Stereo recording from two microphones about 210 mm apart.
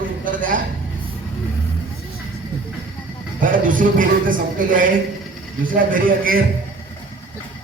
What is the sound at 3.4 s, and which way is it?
A man's voice, 40° right (ahead or behind).